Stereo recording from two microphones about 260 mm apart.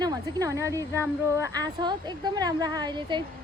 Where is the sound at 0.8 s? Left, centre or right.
Centre.